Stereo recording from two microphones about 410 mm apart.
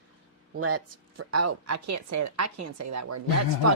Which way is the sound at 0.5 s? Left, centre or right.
Right.